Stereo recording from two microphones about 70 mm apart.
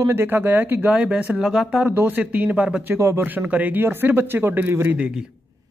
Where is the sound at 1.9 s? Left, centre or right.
Right.